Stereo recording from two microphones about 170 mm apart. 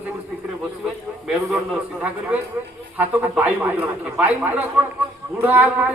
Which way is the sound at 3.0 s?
10° right (ahead or behind).